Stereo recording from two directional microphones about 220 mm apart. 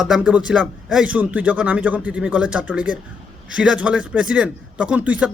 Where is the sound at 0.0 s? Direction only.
5° right (ahead or behind).